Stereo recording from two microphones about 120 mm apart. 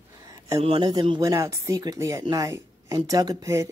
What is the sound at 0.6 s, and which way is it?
Speech, 50° right (ahead or behind).